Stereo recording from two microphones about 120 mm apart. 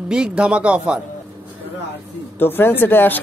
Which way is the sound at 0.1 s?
10° right (ahead or behind).